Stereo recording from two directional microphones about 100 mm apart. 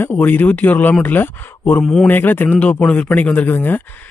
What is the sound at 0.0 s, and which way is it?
Speech, 20° left (ahead or behind).